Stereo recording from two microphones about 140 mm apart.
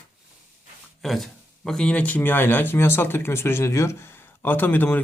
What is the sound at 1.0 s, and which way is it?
Speech, centre (ahead or behind).